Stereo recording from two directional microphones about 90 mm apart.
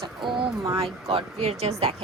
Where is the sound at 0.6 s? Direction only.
40° right (ahead or behind).